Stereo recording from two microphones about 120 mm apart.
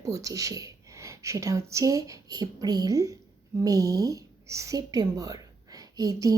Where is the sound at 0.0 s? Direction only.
25° right (ahead or behind).